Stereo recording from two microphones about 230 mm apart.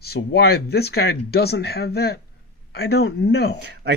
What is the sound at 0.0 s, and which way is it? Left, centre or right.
Speech, left.